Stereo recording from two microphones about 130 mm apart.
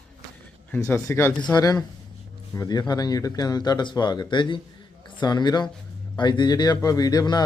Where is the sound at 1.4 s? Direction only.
30° left (ahead or behind).